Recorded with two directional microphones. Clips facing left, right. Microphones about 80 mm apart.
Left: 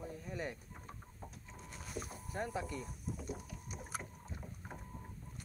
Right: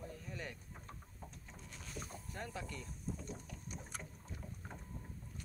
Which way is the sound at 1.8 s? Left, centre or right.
Centre.